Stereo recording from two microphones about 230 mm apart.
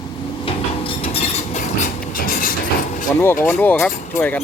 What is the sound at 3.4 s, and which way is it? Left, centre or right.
Speech, centre.